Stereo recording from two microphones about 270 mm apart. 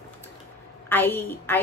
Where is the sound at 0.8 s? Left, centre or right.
Centre.